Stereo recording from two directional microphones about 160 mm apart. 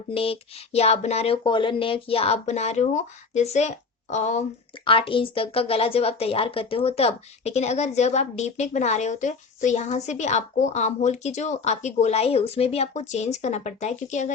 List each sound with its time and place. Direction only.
0.1 s speech: 35° left (ahead or behind)
4.9 s speech: 35° left (ahead or behind)